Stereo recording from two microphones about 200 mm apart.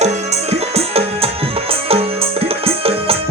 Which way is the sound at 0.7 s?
30° right (ahead or behind).